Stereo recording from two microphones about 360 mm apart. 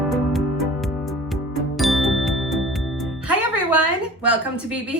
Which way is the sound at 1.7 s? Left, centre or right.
Centre.